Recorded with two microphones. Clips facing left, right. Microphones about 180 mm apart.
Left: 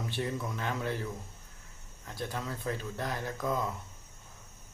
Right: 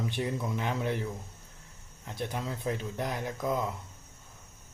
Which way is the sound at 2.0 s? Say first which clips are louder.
Right 2 dB; 20° right (ahead or behind).